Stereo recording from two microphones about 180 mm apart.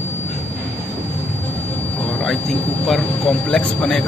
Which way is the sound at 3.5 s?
5° left (ahead or behind).